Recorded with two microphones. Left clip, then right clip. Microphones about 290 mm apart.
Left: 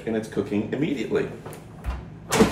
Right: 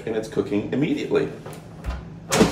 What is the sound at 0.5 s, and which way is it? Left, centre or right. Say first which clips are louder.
Speech: right 3 dB; centre.